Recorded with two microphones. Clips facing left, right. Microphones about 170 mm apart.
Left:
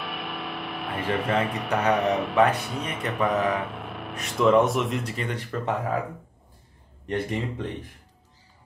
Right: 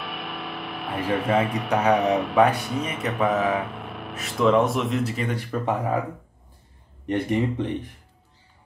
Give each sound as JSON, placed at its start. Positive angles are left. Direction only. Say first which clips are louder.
{"t": 0.0, "sound": "a sound", "louder": "even", "side_deg": 0}
{"t": 2.0, "sound": "speech", "louder": "right 2 dB", "side_deg": 0}
{"t": 7.1, "sound": "speech", "louder": "right 5 dB", "side_deg": -20}